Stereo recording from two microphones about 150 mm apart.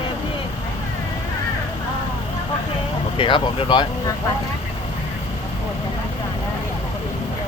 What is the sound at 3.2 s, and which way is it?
Speech, 30° left (ahead or behind).